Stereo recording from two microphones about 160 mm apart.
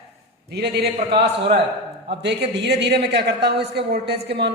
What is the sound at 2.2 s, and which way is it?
A man's voice, 90° right.